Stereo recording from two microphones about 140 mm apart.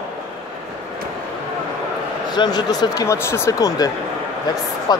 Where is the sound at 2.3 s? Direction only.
30° left (ahead or behind).